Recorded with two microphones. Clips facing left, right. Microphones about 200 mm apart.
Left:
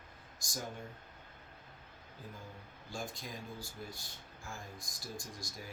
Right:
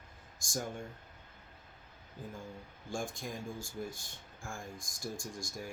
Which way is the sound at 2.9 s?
50° right (ahead or behind).